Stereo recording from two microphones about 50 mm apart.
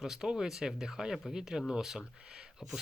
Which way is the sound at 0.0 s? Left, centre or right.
Centre.